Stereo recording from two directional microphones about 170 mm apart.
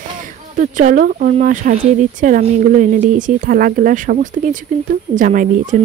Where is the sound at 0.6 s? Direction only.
50° right (ahead or behind).